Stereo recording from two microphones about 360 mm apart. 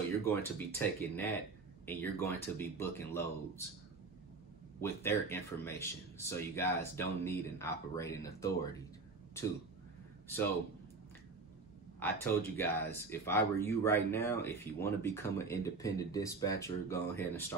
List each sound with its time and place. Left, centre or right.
0.2 s speech: centre
4.7 s speech: centre
12.0 s speech: centre